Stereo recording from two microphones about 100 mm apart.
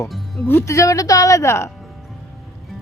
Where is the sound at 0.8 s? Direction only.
35° left (ahead or behind).